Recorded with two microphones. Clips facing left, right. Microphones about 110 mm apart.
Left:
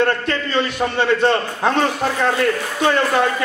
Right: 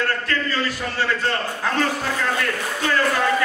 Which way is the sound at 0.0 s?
20° left (ahead or behind).